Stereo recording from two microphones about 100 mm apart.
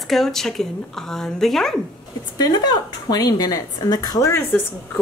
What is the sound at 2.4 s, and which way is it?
A woman's voice, 45° left (ahead or behind).